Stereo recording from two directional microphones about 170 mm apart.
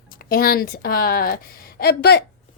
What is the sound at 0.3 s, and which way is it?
A woman's voice, 60° left (ahead or behind).